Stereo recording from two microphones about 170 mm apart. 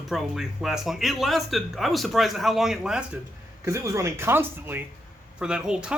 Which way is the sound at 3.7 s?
15° right (ahead or behind).